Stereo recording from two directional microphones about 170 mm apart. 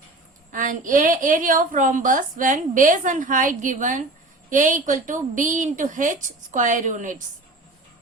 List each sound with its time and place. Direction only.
0.5 s a woman's voice: 50° right (ahead or behind)